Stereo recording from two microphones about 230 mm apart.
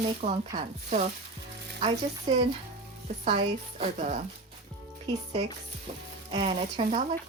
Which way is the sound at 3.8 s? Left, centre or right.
Right.